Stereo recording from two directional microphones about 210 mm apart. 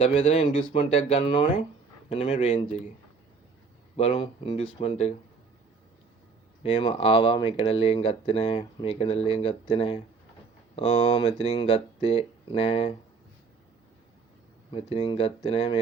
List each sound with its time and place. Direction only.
0.0 s speech: 25° left (ahead or behind)
3.9 s speech: 30° left (ahead or behind)
6.6 s speech: 25° left (ahead or behind)
14.7 s speech: 25° left (ahead or behind)